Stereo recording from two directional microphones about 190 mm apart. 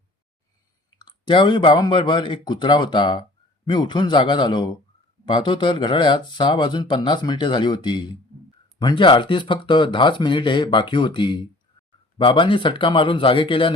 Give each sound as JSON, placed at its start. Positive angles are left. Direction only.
{"t": 0.9, "sound": "speech", "side_deg": 25}